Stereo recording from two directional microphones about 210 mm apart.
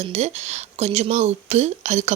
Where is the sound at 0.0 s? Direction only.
30° right (ahead or behind).